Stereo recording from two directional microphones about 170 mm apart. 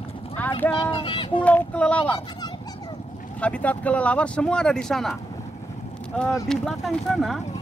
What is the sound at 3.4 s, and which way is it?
Speech, 5° left (ahead or behind).